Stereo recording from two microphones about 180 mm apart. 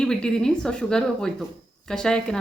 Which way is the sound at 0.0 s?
5° left (ahead or behind).